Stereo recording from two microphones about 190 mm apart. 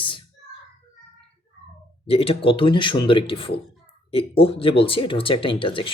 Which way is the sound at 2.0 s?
30° left (ahead or behind).